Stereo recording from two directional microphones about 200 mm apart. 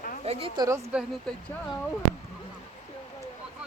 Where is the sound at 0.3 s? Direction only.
30° right (ahead or behind).